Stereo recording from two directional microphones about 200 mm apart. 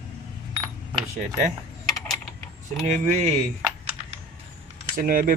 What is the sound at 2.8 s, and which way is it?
Speech, 35° right (ahead or behind).